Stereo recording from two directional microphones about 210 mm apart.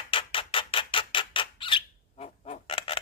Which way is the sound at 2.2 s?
30° left (ahead or behind).